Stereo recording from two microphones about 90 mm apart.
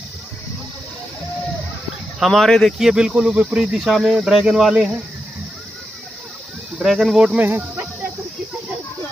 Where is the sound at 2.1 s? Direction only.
Centre (ahead or behind).